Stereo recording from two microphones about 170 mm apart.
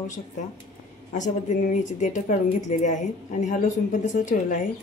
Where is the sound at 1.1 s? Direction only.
45° left (ahead or behind).